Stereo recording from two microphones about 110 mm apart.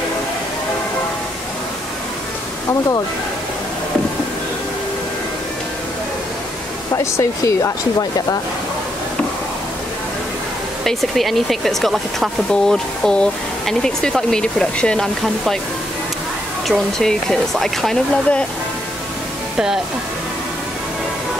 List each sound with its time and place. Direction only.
7.0 s speech: 30° left (ahead or behind)
10.8 s speech: centre (ahead or behind)
16.6 s speech: centre (ahead or behind)
19.5 s speech: 5° right (ahead or behind)